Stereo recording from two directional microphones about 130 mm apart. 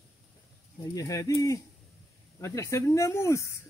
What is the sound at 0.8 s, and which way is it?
Speech, 25° left (ahead or behind).